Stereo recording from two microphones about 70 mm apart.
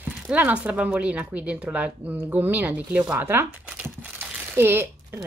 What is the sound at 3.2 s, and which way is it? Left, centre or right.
Speech, right.